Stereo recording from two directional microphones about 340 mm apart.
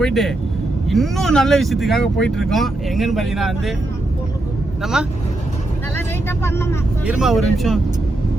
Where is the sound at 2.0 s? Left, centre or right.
Left.